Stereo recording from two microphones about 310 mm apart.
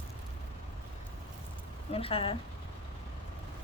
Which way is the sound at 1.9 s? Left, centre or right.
Centre.